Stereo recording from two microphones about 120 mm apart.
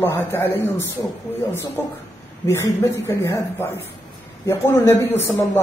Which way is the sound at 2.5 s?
20° left (ahead or behind).